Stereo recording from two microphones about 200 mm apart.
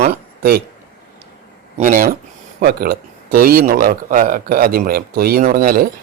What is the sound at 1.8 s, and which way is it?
A man's voice, 45° right (ahead or behind).